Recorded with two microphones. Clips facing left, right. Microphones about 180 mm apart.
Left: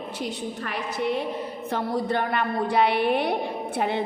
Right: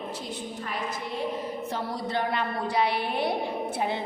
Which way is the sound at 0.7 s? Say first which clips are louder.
Left 7 dB; 70° left (ahead or behind).